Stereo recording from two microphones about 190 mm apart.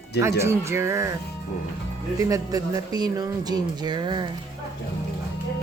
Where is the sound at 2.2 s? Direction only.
20° right (ahead or behind).